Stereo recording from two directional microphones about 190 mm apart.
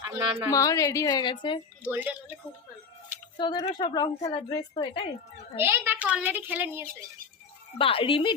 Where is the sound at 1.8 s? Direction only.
10° right (ahead or behind).